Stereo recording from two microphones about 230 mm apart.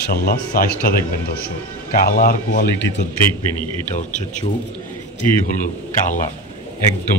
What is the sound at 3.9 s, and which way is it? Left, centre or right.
Speech, left.